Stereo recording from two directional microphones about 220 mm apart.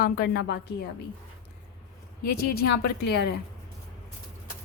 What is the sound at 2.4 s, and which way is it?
Speech, 45° left (ahead or behind).